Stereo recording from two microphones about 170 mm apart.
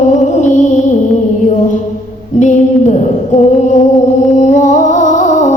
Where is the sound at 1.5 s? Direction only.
50° left (ahead or behind).